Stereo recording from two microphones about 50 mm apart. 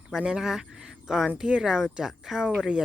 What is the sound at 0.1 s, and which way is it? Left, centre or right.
Speech, centre.